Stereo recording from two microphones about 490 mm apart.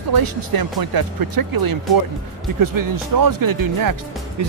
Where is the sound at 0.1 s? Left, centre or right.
Right.